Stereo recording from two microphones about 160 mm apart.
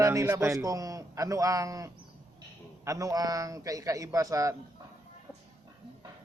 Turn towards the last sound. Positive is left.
turn(degrees=-20)  # may be behind; listen again after turning